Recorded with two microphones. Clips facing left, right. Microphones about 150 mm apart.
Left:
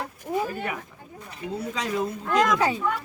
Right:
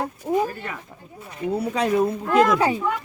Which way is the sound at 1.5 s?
60° right (ahead or behind).